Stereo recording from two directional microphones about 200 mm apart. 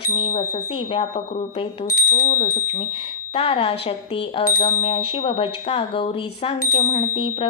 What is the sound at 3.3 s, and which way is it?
Speech, 30° left (ahead or behind).